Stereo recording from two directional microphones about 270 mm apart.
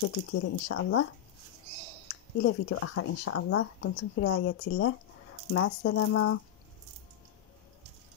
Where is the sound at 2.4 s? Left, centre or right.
Left.